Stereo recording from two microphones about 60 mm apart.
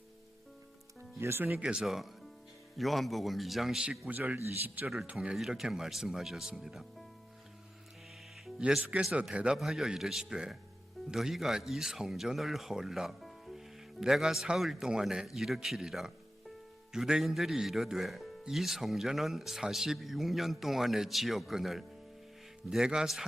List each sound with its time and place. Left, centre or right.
1.2 s speech: right
1.6 s speech: centre
2.7 s speech: centre
4.1 s a man's voice: right
5.2 s speech: centre
8.9 s a man's voice: right
9.6 s speech: centre